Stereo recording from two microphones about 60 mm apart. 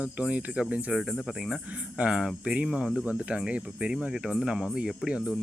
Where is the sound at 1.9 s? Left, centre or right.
Centre.